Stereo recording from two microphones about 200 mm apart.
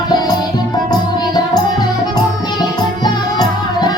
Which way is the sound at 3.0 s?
20° left (ahead or behind).